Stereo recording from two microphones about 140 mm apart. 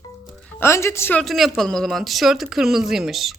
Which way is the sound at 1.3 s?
Centre (ahead or behind).